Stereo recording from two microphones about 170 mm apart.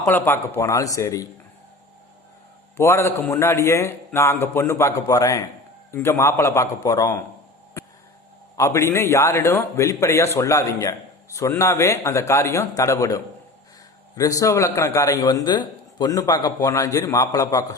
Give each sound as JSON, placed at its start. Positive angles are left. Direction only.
{"t": 0.0, "sound": "a man's voice", "side_deg": 15}
{"t": 2.7, "sound": "a man's voice", "side_deg": 15}
{"t": 8.5, "sound": "a man's voice", "side_deg": 20}